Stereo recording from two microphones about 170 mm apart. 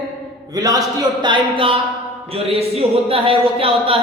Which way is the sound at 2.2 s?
35° right (ahead or behind).